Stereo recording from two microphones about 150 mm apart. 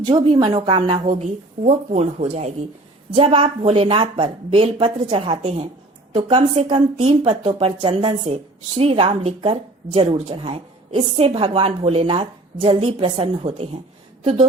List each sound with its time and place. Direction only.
0.1 s speech: 35° right (ahead or behind)